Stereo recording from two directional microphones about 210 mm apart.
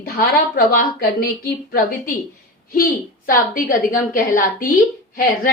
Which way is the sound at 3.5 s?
45° left (ahead or behind).